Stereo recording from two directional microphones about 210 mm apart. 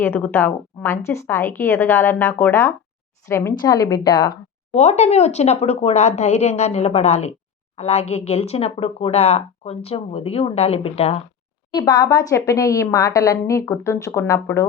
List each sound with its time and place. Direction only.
0.0 s a woman's voice: 10° left (ahead or behind)
4.7 s a woman's voice: 30° left (ahead or behind); by 14.7 s 15° left (ahead or behind)